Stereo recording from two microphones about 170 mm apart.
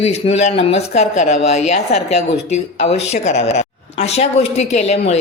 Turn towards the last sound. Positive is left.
turn(degrees=40)  # may be behind; listen again after turning